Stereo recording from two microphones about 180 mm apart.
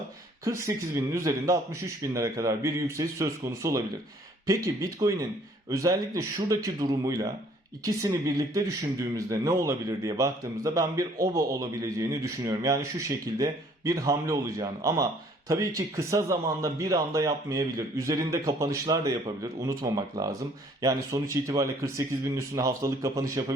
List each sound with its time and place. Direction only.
0.4 s a man's voice: 15° right (ahead or behind)